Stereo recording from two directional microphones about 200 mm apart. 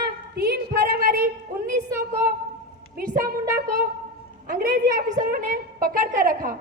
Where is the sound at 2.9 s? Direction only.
45° right (ahead or behind).